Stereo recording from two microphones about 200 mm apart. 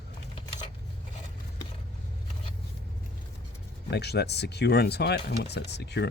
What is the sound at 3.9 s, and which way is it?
Speech, 55° left (ahead or behind).